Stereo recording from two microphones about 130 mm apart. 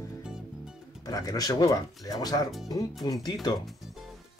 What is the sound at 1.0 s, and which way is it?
Speech, 30° left (ahead or behind).